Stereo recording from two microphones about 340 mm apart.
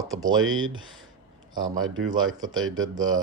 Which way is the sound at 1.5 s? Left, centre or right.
Centre.